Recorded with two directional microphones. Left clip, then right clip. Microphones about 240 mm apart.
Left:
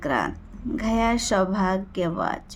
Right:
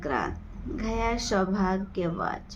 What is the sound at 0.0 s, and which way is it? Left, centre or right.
Speech, left.